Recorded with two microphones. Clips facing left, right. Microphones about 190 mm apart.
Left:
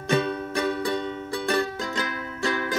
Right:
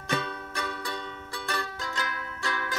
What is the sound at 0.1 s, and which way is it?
Music, 20° left (ahead or behind).